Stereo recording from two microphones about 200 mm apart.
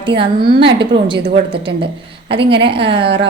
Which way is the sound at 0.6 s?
25° right (ahead or behind).